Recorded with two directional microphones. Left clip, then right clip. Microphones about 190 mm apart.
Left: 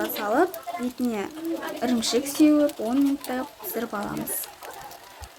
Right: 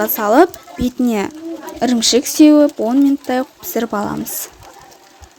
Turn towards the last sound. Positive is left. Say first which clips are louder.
# right 10 dB
turn(degrees=-45)  # may be behind; listen again after turning